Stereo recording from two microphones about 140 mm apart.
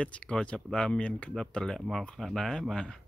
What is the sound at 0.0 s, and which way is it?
Speech, 10° left (ahead or behind).